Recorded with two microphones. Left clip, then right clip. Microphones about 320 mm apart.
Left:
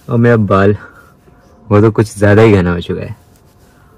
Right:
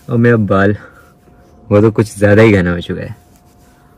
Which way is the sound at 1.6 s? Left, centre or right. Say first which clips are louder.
Even; left.